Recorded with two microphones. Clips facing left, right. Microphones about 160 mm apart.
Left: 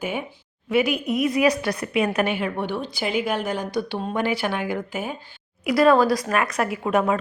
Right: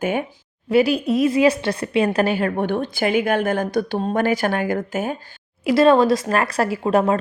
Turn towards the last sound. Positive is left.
turn(degrees=-30)  # may be behind; listen again after turning